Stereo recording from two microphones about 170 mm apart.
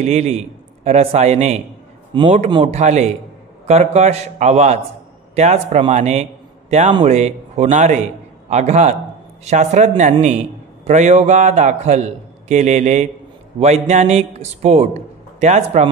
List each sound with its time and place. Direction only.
0.0 s a man's voice: 40° right (ahead or behind)